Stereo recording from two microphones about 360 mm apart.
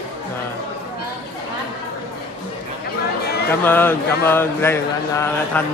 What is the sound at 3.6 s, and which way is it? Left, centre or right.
Speech, centre.